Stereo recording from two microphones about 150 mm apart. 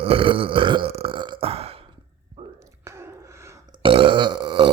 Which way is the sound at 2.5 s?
20° right (ahead or behind).